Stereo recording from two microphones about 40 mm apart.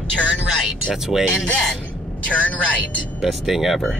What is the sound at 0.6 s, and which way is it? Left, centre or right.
Speech, centre.